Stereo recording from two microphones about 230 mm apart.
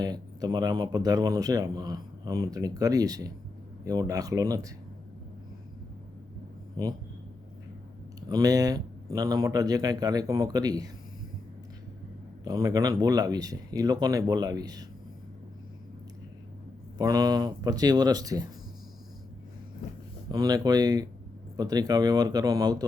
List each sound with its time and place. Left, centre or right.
0.0 s speech: centre
6.8 s speech: centre
8.3 s speech: centre
12.5 s speech: centre
17.0 s speech: centre
20.3 s speech: centre